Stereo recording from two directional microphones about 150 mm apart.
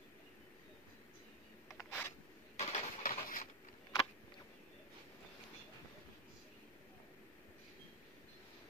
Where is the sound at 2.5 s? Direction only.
60° left (ahead or behind).